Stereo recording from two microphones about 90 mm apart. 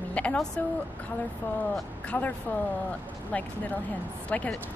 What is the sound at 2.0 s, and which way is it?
Speech, 15° left (ahead or behind).